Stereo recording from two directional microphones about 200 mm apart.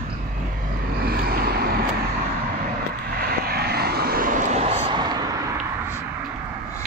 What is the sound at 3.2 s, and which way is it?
Vehicle, 50° right (ahead or behind).